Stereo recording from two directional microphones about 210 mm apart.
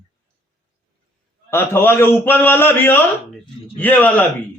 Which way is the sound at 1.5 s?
10° left (ahead or behind).